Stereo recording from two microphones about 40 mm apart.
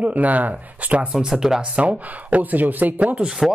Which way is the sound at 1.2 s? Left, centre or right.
Centre.